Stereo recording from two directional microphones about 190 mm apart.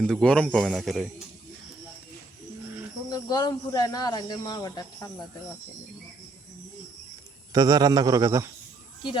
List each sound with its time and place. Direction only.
0.0 s speech: 5° left (ahead or behind)
3.1 s speech: 20° left (ahead or behind)
7.5 s a man's voice: 20° right (ahead or behind)